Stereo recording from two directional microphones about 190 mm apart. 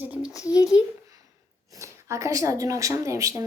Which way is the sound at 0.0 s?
10° right (ahead or behind).